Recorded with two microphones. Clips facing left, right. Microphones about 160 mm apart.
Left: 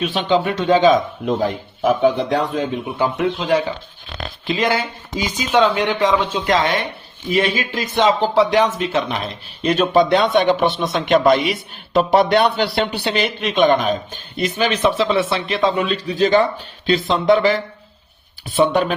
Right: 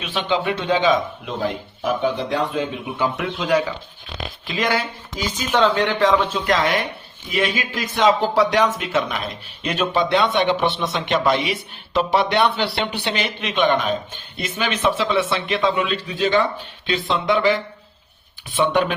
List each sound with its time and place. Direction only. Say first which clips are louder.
0.0 s speech: left 4 dB; 40° left (ahead or behind)
3.2 s speech: left 2 dB; 25° left (ahead or behind)